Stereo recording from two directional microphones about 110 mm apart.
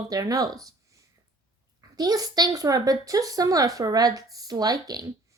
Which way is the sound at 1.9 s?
35° right (ahead or behind).